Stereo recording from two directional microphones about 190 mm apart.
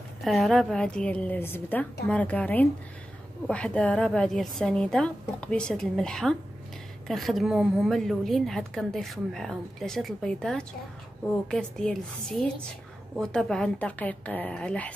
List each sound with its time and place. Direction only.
0.2 s a woman's voice: centre (ahead or behind)